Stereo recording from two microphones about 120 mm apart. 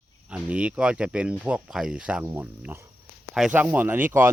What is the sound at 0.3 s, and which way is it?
Speech, 10° right (ahead or behind).